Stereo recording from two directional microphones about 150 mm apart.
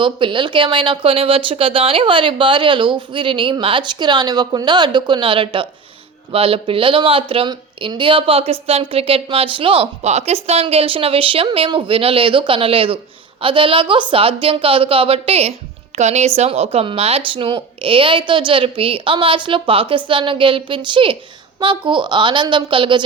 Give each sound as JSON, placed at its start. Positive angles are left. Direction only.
{"t": 0.0, "sound": "speech", "side_deg": -35}